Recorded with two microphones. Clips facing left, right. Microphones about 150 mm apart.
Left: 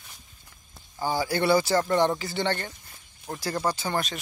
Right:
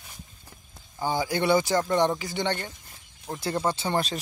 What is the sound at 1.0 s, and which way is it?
Speech, 20° right (ahead or behind).